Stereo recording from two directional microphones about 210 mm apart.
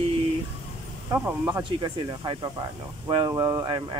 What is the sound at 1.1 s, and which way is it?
Speech, 10° right (ahead or behind).